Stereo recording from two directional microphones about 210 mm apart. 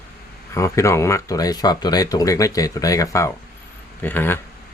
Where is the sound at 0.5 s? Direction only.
15° left (ahead or behind).